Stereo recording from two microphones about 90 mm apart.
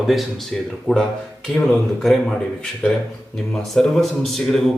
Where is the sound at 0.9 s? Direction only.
15° left (ahead or behind).